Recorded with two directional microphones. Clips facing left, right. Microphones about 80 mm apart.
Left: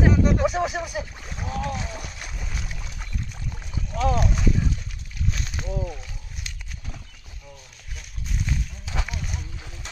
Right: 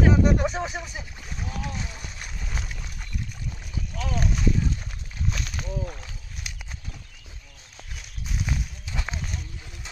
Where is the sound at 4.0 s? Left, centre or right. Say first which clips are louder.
Left 8 dB; left.